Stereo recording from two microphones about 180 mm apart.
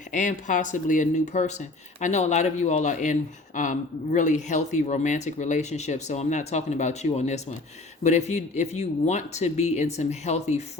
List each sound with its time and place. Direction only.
0.1 s speech: 45° left (ahead or behind)